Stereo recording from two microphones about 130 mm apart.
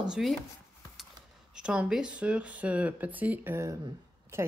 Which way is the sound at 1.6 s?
5° right (ahead or behind).